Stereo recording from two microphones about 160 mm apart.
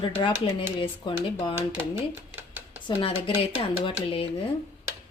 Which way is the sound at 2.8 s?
35° left (ahead or behind).